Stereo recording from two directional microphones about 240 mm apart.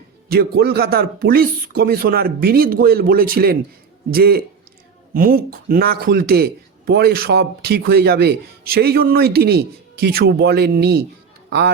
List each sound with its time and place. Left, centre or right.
0.3 s speech: right